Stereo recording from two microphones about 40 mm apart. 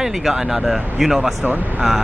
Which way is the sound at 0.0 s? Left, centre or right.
Centre.